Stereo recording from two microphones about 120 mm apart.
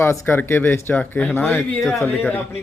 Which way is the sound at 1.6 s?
Centre (ahead or behind).